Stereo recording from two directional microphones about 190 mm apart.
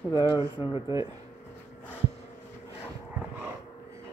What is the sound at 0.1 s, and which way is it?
Speech, 20° left (ahead or behind).